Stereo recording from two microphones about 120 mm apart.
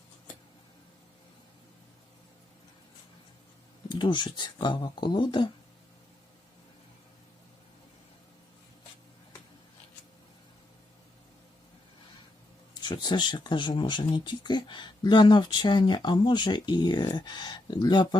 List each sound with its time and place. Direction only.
3.8 s speech: 40° left (ahead or behind)
12.8 s speech: 35° left (ahead or behind)